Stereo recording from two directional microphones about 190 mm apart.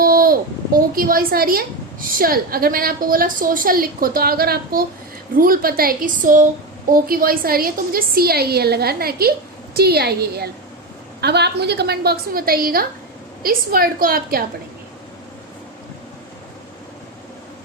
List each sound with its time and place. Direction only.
0.0 s a woman's voice: 50° right (ahead or behind)